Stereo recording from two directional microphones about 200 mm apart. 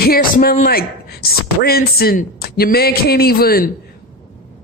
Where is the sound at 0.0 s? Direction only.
45° left (ahead or behind).